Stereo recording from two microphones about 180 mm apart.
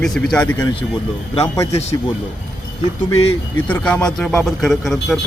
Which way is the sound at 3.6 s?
10° left (ahead or behind).